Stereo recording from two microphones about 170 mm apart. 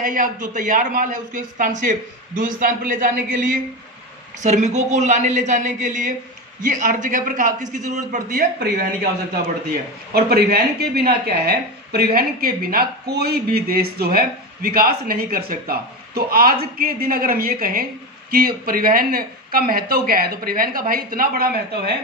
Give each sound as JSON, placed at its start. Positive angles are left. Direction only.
{"t": 0.0, "sound": "a man's voice", "side_deg": -50}
{"t": 8.5, "sound": "a woman's voice", "side_deg": -70}